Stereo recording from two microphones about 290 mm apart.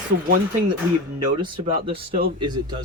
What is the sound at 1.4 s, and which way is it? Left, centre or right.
Speech, centre.